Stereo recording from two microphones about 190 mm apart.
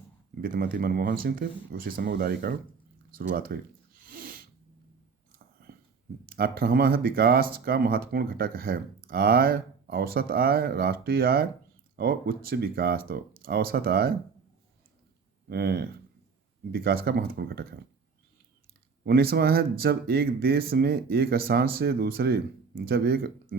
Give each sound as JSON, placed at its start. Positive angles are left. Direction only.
{"t": 0.4, "sound": "speech", "side_deg": -50}
{"t": 3.2, "sound": "a sound", "side_deg": -50}
{"t": 6.2, "sound": "speech", "side_deg": -50}
{"t": 15.4, "sound": "speech", "side_deg": -55}
{"t": 19.0, "sound": "speech", "side_deg": -55}